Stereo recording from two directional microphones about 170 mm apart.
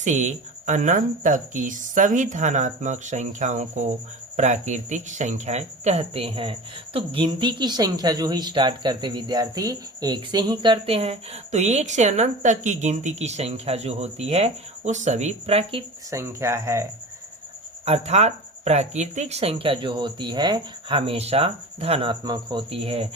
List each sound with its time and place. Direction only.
0.0 s speech: 45° right (ahead or behind)
16.0 s speech: 15° right (ahead or behind)
17.8 s speech: 40° right (ahead or behind)